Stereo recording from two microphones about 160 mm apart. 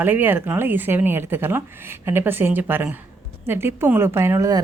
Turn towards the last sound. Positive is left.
turn(degrees=-20)  # may be behind; listen again after turning